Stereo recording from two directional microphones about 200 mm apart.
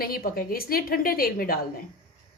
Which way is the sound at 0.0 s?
50° left (ahead or behind).